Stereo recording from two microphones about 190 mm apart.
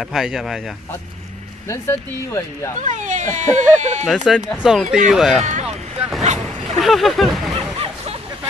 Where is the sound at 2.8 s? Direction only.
40° right (ahead or behind).